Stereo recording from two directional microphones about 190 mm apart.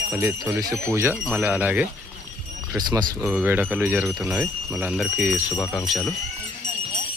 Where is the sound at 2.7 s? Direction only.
20° right (ahead or behind).